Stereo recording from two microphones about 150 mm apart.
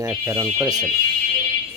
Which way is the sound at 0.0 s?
25° right (ahead or behind).